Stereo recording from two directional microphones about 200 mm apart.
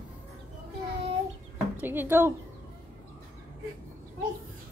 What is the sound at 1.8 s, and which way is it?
Speech, 10° right (ahead or behind).